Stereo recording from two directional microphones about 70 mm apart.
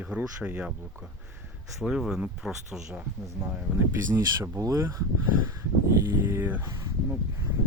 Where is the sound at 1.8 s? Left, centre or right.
Centre.